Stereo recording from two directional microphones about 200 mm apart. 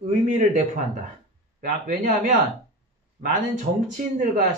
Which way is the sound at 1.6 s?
40° right (ahead or behind).